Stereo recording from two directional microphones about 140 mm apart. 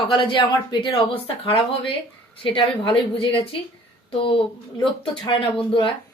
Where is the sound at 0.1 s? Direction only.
35° left (ahead or behind).